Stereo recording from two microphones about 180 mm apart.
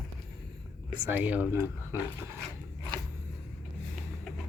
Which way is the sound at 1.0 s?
10° right (ahead or behind).